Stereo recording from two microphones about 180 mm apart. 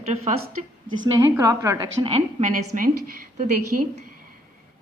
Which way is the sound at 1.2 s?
20° right (ahead or behind).